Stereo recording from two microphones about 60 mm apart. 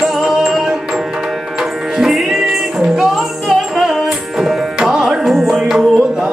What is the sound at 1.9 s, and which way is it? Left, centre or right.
Music, centre.